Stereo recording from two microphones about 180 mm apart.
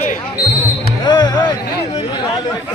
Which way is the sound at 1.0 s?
25° left (ahead or behind).